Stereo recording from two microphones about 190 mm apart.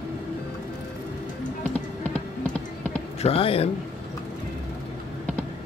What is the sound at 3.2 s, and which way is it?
Speech, 30° left (ahead or behind).